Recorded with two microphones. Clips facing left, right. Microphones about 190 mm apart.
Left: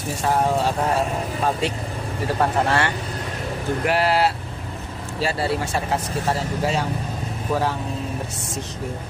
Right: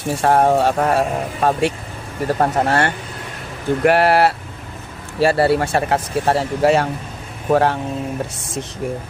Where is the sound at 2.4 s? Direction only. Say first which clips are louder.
Right 3 dB; 45° right (ahead or behind).